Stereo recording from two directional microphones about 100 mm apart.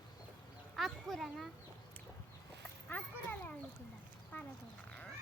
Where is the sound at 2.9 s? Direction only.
15° left (ahead or behind).